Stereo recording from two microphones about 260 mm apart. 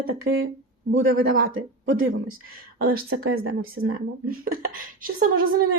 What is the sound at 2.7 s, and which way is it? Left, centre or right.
Speech, right.